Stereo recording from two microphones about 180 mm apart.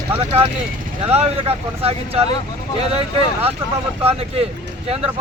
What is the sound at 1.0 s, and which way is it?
Speech, 35° right (ahead or behind).